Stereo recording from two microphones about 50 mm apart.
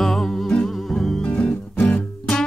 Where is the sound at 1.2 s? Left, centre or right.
Left.